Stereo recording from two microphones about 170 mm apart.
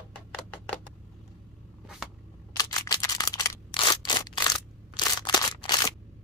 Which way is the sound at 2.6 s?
20° left (ahead or behind).